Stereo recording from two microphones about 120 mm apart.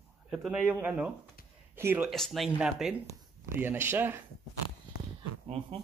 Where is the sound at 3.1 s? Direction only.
20° right (ahead or behind).